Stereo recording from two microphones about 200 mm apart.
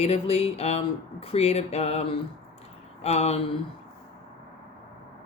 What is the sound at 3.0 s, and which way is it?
Speech, 30° left (ahead or behind).